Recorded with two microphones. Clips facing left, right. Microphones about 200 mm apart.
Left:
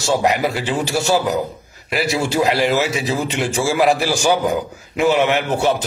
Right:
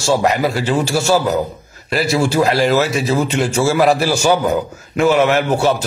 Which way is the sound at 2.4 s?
15° left (ahead or behind).